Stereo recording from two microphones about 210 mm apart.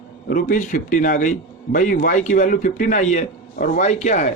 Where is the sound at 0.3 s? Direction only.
40° left (ahead or behind).